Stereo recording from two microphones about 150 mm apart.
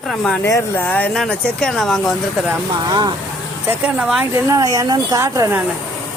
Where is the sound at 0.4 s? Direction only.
20° left (ahead or behind); by 2.1 s 5° left (ahead or behind).